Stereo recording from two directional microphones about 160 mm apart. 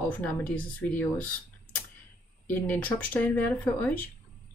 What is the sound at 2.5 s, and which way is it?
Speech, 10° left (ahead or behind).